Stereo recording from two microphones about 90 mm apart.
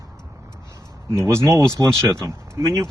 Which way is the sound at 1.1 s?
30° right (ahead or behind).